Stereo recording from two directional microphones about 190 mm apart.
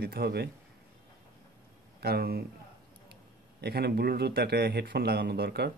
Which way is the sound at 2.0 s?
55° right (ahead or behind).